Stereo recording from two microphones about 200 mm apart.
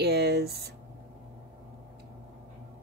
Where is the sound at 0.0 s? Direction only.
55° right (ahead or behind).